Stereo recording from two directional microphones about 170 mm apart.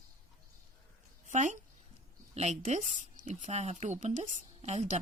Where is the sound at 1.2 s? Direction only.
45° right (ahead or behind).